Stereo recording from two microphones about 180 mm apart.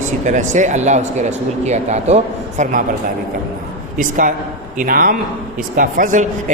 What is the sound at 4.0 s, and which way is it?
Speech, 45° right (ahead or behind).